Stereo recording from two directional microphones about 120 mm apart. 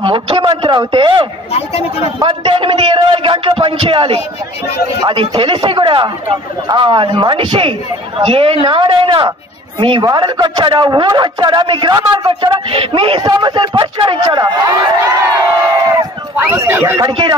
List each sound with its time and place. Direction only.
0.0 s a man's voice: 45° right (ahead or behind)
1.5 s speech: 55° left (ahead or behind)
2.2 s a man's voice: 45° right (ahead or behind)
13.2 s a man's voice: 35° right (ahead or behind)
15.9 s a sound: 20° right (ahead or behind)
17.1 s a man's voice: 40° right (ahead or behind)